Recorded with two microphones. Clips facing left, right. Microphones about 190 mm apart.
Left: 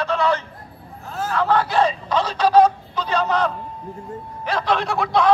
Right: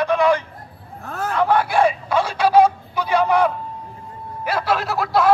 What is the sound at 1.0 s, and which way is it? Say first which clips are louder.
Hubbub: right 1 dB; 60° right (ahead or behind).